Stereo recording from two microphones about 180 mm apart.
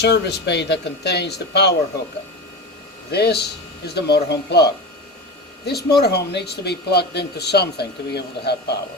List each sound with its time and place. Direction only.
0.0 s speech: 70° left (ahead or behind)
3.1 s speech: 65° left (ahead or behind)